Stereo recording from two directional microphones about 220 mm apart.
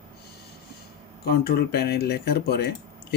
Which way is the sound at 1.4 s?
45° left (ahead or behind).